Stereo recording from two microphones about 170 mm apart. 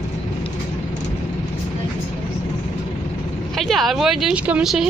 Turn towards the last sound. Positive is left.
turn(degrees=-5)  # may be behind; listen again after turning